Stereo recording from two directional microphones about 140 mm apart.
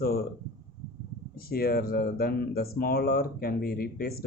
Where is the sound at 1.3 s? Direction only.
90° left.